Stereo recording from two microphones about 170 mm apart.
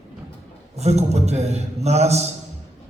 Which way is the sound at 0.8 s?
40° right (ahead or behind).